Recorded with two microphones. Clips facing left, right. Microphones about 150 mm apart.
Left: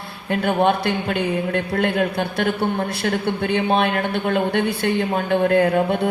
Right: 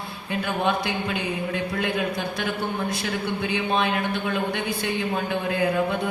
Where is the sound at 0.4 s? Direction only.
60° left (ahead or behind).